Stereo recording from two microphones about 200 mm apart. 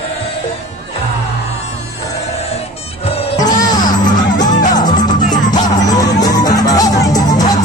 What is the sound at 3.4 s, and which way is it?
Music, 20° left (ahead or behind).